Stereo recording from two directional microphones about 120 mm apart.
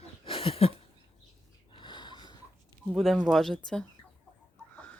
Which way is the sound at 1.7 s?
40° left (ahead or behind).